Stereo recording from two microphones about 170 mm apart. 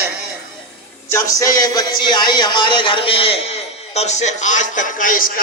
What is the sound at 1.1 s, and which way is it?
Speech, 20° left (ahead or behind).